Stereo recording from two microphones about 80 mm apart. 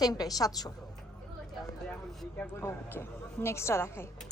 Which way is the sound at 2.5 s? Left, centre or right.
Left.